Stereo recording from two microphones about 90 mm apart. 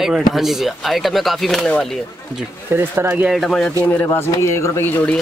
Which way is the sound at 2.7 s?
25° right (ahead or behind).